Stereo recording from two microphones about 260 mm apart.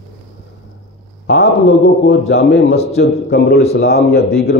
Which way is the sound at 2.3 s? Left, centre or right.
Left.